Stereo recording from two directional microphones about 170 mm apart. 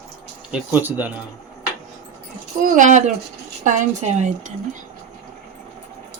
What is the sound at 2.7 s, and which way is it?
Speech, 45° right (ahead or behind).